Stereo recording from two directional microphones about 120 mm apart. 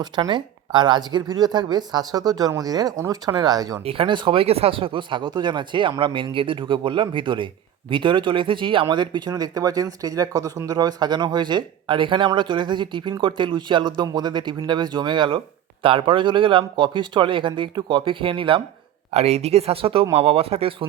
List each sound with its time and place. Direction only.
0.0 s speech: 40° right (ahead or behind)
3.8 s speech: 50° right (ahead or behind)
19.1 s speech: 60° right (ahead or behind)